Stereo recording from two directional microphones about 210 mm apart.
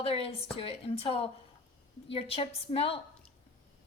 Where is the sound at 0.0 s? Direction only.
30° left (ahead or behind).